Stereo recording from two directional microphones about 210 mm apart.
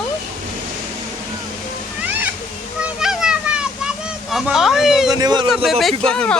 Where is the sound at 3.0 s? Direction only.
5° right (ahead or behind).